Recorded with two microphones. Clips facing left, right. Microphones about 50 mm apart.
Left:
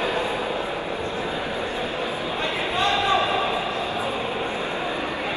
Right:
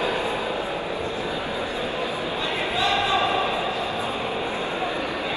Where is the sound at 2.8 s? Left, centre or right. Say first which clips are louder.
Left 2 dB; left.